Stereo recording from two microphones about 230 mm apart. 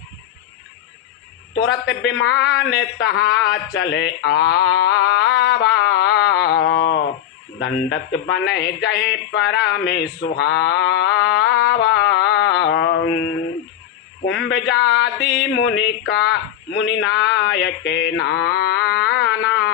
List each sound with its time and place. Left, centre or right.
1.5 s a man's voice: left
10.2 s a sound: left
14.3 s speech: left
14.8 s music: left
15.4 s speech: left
19.1 s a sound: left